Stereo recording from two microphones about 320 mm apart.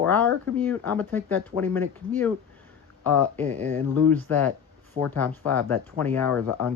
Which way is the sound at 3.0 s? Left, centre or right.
Centre.